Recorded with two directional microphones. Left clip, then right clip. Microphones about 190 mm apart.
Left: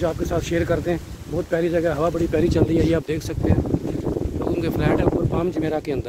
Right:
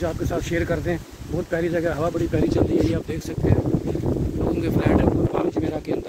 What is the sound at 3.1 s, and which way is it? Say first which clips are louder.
Speech: left 5 dB; 40° left (ahead or behind).